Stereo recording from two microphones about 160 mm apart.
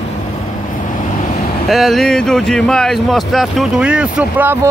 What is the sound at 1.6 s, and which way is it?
Speech, centre (ahead or behind).